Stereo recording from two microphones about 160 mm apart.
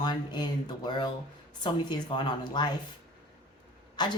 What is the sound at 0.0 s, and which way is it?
Speech, 25° left (ahead or behind).